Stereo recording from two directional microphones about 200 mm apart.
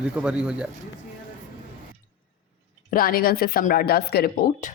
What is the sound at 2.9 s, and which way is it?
A woman's voice, 45° left (ahead or behind).